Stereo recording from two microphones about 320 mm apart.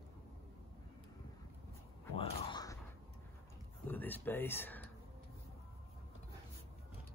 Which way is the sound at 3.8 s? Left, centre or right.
Centre.